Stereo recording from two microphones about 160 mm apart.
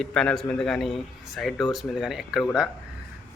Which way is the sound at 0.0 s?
5° left (ahead or behind).